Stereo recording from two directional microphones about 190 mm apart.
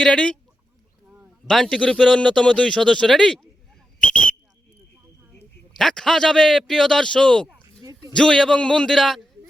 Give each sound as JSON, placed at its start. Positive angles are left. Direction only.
{"t": 0.0, "sound": "a man's voice", "side_deg": 5}
{"t": 5.3, "sound": "a man's voice", "side_deg": 5}
{"t": 7.8, "sound": "a sound", "side_deg": -20}
{"t": 8.1, "sound": "a man's voice", "side_deg": 5}